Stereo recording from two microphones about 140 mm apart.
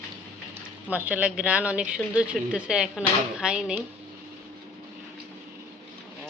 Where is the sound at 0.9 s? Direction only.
10° right (ahead or behind).